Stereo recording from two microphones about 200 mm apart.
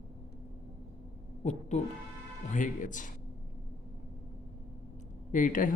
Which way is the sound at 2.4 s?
40° left (ahead or behind).